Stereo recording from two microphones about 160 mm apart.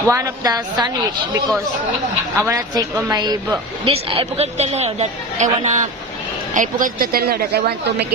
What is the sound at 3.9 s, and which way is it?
A woman's voice, 35° right (ahead or behind).